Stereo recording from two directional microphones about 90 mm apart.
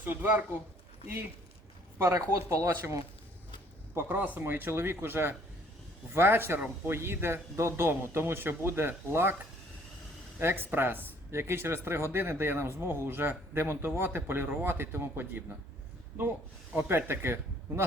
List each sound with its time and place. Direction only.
0.0 s speech: 20° right (ahead or behind)
2.0 s speech: 30° right (ahead or behind)
3.9 s speech: 20° right (ahead or behind)
10.4 s speech: 25° right (ahead or behind)
16.7 s speech: 25° right (ahead or behind)